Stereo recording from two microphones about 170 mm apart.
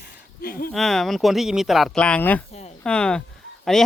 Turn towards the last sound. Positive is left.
turn(degrees=0)  # may be behind; listen again after turning